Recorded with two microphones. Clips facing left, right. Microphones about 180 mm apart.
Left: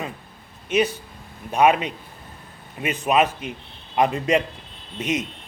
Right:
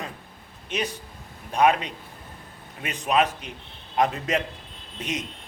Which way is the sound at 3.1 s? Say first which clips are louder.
Left 2 dB; 5° left (ahead or behind).